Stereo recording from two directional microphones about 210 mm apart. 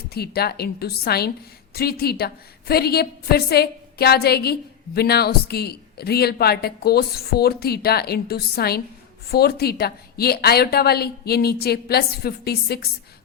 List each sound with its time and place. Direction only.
0.1 s speech: 50° left (ahead or behind)